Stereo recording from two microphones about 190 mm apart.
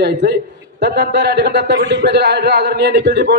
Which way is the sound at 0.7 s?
60° right (ahead or behind).